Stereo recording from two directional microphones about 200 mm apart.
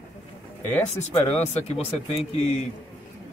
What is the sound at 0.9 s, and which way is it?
Speech, 35° left (ahead or behind).